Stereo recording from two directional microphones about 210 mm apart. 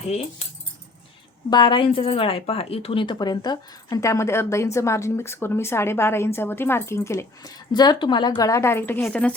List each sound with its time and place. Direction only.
0.1 s speech: 30° left (ahead or behind)
1.5 s a woman's voice: 20° left (ahead or behind)